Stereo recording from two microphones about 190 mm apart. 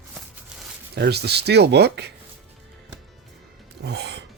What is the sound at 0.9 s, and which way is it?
Speech, 55° right (ahead or behind).